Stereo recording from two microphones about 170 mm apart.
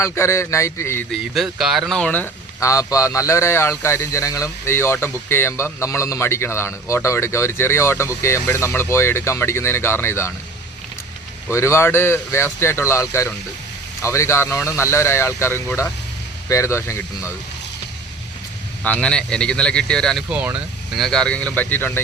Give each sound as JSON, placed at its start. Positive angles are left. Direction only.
{"t": 0.0, "sound": "speech", "side_deg": 15}
{"t": 1.1, "sound": "speech", "side_deg": 0}
{"t": 11.5, "sound": "speech", "side_deg": 15}
{"t": 18.8, "sound": "speech", "side_deg": 5}
{"t": 20.3, "sound": "speech", "side_deg": -10}